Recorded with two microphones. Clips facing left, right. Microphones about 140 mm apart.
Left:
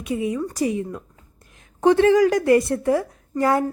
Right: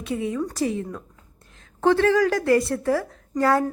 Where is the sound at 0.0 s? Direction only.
10° left (ahead or behind).